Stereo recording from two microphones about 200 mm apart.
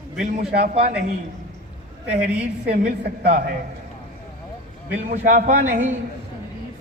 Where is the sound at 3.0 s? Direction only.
50° right (ahead or behind).